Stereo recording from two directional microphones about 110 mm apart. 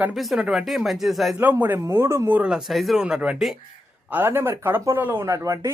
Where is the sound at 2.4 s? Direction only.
5° right (ahead or behind).